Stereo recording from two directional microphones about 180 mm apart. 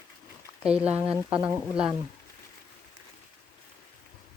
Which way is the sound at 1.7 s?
5° right (ahead or behind).